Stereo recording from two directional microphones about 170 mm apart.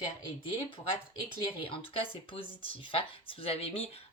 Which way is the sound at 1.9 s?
30° left (ahead or behind).